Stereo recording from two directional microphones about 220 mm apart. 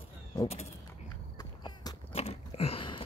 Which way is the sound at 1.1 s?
15° left (ahead or behind).